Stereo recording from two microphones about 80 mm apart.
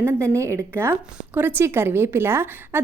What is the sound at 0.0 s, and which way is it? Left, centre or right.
A woman's voice, right.